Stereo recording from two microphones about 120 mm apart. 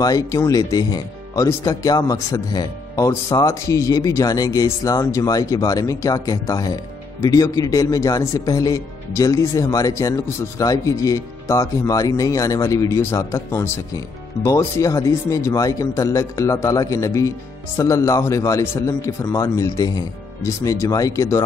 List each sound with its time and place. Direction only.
0.0 s speech: 30° left (ahead or behind)